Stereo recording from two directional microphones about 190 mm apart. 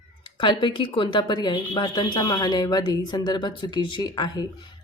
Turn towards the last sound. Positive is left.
turn(degrees=20)  # may be behind; listen again after turning